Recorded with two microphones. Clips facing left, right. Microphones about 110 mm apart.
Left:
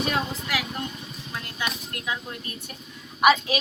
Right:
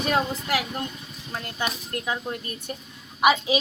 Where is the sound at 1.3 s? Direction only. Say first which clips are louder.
Right 2 dB; 35° right (ahead or behind).